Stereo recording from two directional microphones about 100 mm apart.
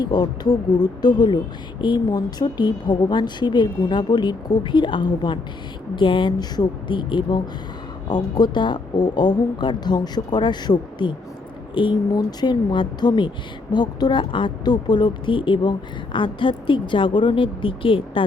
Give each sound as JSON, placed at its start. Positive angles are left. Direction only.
{"t": 0.0, "sound": "a woman's voice", "side_deg": 45}